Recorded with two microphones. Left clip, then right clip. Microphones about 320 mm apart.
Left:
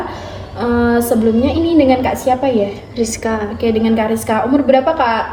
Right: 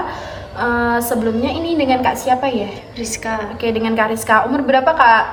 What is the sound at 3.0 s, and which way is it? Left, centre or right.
Speech, centre.